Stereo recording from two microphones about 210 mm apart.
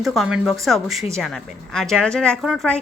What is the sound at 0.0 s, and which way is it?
A woman's voice, centre (ahead or behind).